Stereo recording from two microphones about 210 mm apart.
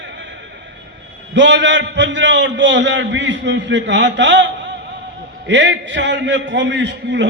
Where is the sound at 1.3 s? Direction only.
60° right (ahead or behind).